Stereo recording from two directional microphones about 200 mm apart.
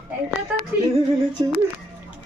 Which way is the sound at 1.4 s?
20° right (ahead or behind).